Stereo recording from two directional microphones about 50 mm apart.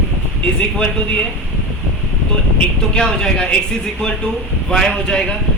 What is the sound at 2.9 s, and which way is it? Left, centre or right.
A man's voice, centre.